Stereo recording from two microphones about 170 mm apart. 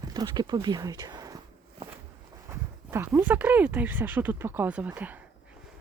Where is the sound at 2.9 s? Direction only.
15° right (ahead or behind).